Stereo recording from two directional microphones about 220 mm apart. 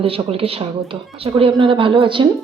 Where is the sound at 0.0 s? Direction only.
25° right (ahead or behind).